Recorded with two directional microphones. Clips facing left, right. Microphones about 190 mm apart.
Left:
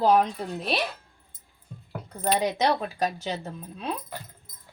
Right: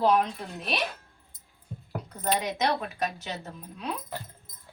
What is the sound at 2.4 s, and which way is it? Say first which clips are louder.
Speech: left 4 dB; 30° left (ahead or behind).